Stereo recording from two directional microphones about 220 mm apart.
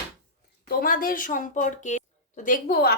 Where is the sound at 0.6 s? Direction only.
40° left (ahead or behind).